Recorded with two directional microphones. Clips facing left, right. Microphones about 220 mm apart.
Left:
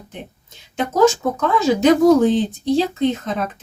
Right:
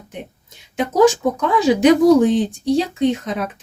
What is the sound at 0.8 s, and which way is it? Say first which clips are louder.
A woman's voice: right 1 dB; 15° right (ahead or behind).